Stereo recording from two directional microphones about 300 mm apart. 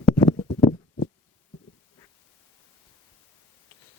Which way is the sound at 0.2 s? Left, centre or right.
Centre.